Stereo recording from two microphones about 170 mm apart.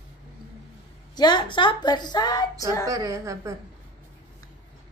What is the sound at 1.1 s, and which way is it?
A woman's voice, 25° left (ahead or behind).